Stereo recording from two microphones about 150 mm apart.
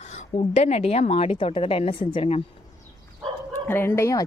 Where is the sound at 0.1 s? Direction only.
45° left (ahead or behind).